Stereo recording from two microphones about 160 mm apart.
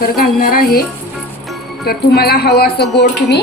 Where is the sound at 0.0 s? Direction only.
65° left (ahead or behind).